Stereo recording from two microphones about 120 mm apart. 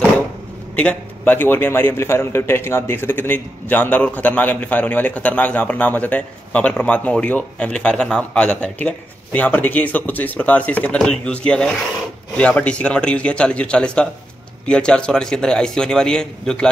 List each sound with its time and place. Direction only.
0.7 s a man's voice: 10° left (ahead or behind)